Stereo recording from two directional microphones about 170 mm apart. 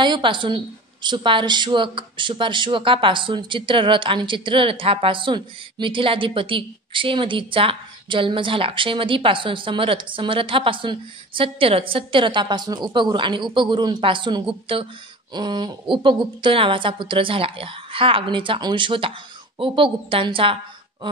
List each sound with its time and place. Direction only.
0.0 s a woman's voice: 30° right (ahead or behind)